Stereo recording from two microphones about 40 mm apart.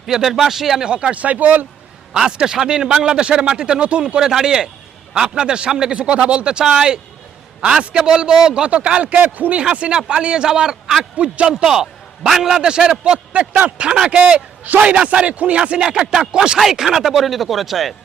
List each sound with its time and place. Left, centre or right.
0.0 s speech: centre
0.9 s a man's voice: right
1.1 s speech: right
2.1 s a man's voice: centre
4.0 s a man's voice: centre
8.6 s speech: right
10.1 s a man's voice: right
11.2 s a man's voice: right
11.5 s a man's voice: centre
13.3 s a man's voice: right
14.7 s a man's voice: right
16.6 s speech: centre